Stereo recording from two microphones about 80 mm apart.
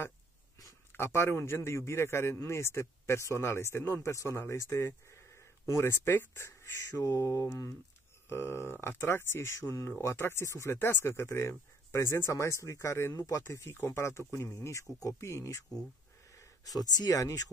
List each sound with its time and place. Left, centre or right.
0.6 s a man's voice: left